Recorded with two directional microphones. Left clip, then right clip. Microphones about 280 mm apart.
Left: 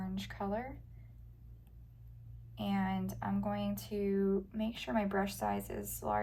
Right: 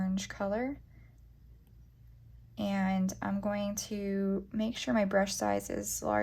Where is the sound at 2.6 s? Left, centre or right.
Right.